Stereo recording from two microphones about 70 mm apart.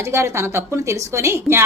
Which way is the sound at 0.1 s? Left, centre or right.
Right.